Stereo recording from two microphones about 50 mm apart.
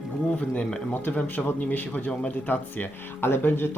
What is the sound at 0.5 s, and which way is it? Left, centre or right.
Speech, centre.